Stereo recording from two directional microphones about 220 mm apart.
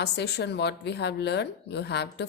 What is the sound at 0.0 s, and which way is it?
A woman's voice, 50° left (ahead or behind).